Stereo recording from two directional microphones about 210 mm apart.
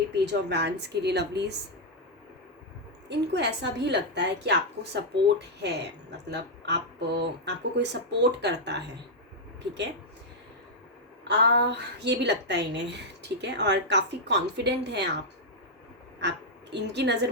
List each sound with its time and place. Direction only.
0.1 s a woman's voice: 55° right (ahead or behind)
3.1 s a woman's voice: 55° right (ahead or behind)
11.3 s a woman's voice: 55° right (ahead or behind)
16.2 s a woman's voice: 55° right (ahead or behind)